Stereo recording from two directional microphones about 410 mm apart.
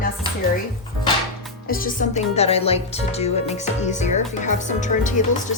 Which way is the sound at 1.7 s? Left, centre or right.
Centre.